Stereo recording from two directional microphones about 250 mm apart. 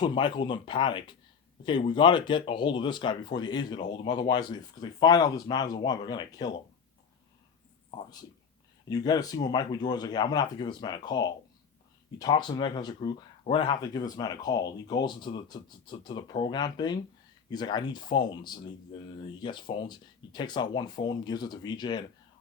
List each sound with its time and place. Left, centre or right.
0.0 s speech: centre
7.9 s speech: left